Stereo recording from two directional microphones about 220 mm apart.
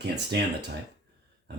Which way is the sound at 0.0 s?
50° right (ahead or behind).